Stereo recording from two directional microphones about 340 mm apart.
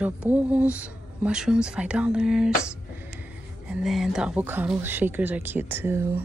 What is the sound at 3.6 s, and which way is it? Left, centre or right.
Speech, centre.